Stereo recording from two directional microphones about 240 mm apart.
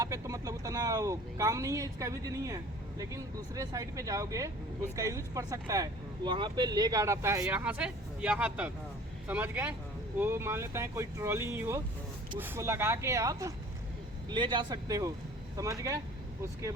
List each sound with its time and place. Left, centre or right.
0.0 s speech: centre